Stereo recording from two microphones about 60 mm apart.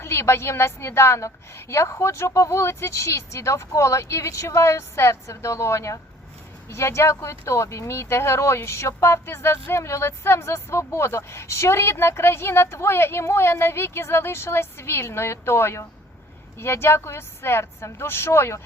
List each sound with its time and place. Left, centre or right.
0.0 s a woman's voice: left